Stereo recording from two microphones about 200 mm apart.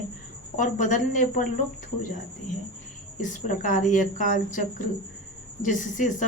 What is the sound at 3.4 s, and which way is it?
Speech, 40° left (ahead or behind).